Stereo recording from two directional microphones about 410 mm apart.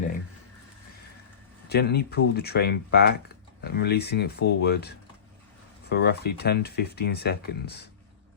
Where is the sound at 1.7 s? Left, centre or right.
Left.